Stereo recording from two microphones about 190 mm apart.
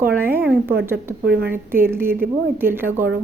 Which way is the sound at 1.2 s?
55° right (ahead or behind).